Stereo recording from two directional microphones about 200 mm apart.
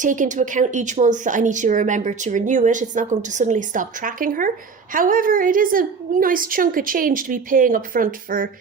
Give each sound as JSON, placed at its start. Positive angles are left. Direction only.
{"t": 0.0, "sound": "a woman's voice", "side_deg": -40}